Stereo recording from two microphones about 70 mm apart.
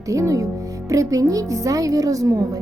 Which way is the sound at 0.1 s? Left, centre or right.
Right.